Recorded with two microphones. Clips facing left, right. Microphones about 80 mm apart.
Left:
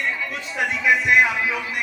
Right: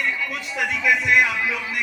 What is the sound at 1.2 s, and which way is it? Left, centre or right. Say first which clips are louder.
Music: left 1 dB; centre.